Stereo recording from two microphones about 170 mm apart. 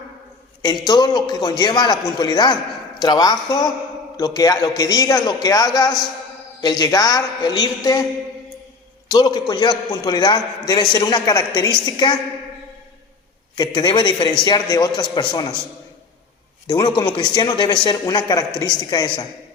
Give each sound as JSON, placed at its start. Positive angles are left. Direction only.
{"t": 0.6, "sound": "a man's voice", "side_deg": 25}
{"t": 9.0, "sound": "a man's voice", "side_deg": 20}
{"t": 13.6, "sound": "a man's voice", "side_deg": 25}
{"t": 16.6, "sound": "a man's voice", "side_deg": 25}